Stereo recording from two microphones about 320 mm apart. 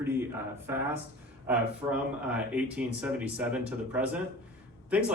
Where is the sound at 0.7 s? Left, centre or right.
Centre.